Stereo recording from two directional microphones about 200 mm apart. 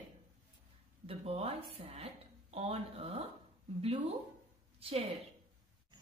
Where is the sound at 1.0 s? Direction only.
30° right (ahead or behind).